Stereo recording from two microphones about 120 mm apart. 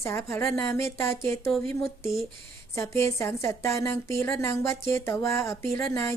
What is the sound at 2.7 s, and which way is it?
A woman's voice, 25° left (ahead or behind).